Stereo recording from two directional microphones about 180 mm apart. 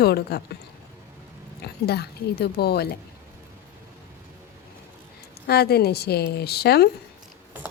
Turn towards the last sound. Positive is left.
turn(degrees=60)  # may be behind; listen again after turning